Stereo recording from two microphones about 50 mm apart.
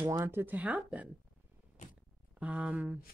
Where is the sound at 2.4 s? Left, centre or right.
Right.